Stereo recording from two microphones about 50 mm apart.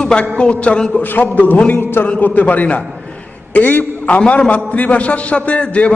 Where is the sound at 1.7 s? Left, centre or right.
Left.